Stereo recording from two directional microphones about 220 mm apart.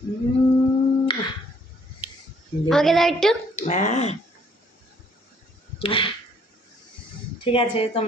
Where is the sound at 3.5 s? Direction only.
30° left (ahead or behind).